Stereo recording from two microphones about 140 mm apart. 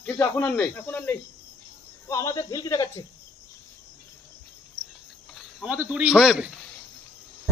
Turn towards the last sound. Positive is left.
turn(degrees=-5)  # may be behind; listen again after turning